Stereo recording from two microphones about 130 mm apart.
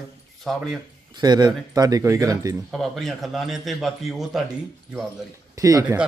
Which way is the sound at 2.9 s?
Centre (ahead or behind).